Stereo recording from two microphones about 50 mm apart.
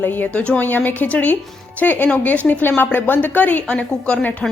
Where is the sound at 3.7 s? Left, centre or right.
Left.